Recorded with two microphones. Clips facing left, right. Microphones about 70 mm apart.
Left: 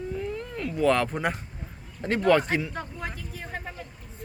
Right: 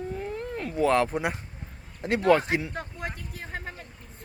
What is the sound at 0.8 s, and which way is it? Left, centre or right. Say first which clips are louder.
Speech: even; right.